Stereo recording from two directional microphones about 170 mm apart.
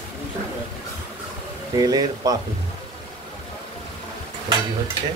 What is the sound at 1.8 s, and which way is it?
Speech, 20° right (ahead or behind).